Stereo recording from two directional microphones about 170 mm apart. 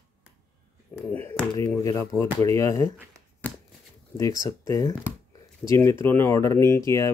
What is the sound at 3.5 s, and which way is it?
Shuffling cards, 10° left (ahead or behind).